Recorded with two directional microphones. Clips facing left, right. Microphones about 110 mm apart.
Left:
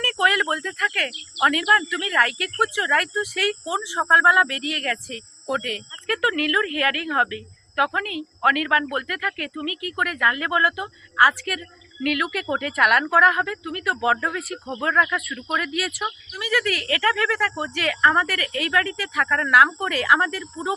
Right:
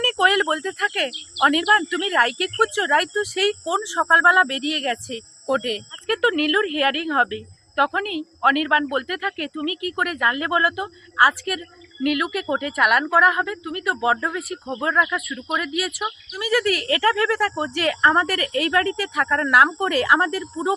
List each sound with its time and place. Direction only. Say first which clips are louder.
0.0 s speech: right 3 dB; 30° right (ahead or behind)
16.4 s speech: right 3 dB; 35° right (ahead or behind)